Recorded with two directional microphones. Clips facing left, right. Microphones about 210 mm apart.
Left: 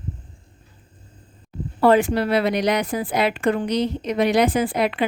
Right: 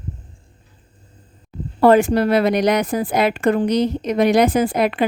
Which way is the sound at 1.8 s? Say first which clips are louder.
Right 4 dB; 45° right (ahead or behind).